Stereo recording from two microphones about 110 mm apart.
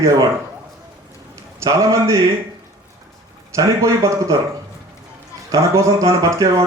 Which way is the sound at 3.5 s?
25° right (ahead or behind).